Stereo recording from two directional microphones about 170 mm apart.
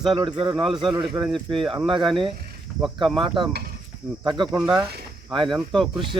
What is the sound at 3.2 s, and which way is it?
Speech, 30° right (ahead or behind).